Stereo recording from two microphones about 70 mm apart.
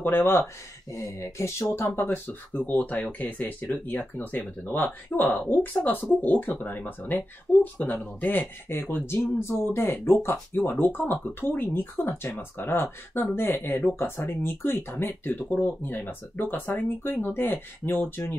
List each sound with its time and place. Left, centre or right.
0.0 s speech: left
0.9 s speech: left
2.0 s speech: left